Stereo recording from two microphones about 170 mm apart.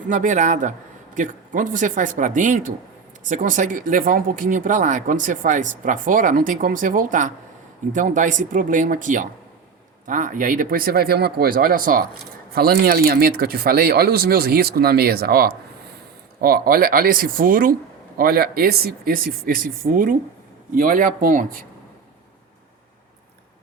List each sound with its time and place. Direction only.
0.1 s speech: 45° right (ahead or behind)